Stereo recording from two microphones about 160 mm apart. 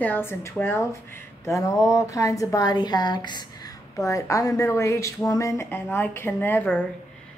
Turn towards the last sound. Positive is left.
turn(degrees=10)  # may be behind; listen again after turning